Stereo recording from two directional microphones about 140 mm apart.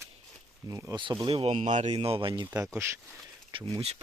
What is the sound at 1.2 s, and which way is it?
Speech, 40° right (ahead or behind).